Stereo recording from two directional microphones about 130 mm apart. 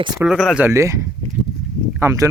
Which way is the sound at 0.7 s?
25° right (ahead or behind).